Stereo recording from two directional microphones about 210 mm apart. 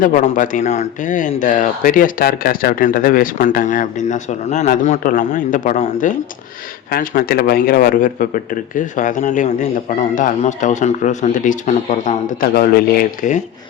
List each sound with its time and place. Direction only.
0.0 s speech: 40° left (ahead or behind)